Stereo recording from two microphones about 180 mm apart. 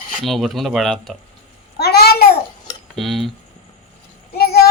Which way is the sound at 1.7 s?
60° left (ahead or behind).